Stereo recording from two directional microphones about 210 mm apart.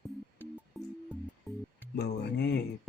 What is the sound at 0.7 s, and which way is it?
Music, centre (ahead or behind).